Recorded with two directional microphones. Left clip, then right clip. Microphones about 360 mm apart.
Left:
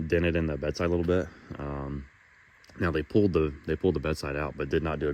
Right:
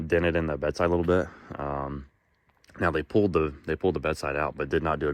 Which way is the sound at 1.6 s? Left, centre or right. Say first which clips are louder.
Right 6 dB; right.